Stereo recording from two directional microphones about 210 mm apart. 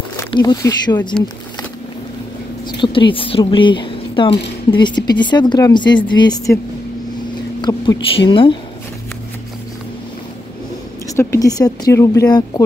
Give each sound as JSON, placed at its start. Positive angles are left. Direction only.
{"t": 0.2, "sound": "speech", "side_deg": 20}
{"t": 2.8, "sound": "a woman's voice", "side_deg": 25}
{"t": 7.6, "sound": "a sound", "side_deg": 20}
{"t": 8.3, "sound": "a woman's voice", "side_deg": 25}
{"t": 11.1, "sound": "speech", "side_deg": 15}